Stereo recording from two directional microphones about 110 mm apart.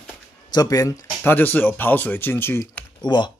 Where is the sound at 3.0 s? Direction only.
45° left (ahead or behind).